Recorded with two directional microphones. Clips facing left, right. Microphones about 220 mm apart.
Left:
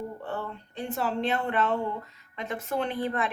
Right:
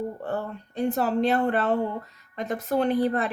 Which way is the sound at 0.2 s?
40° right (ahead or behind).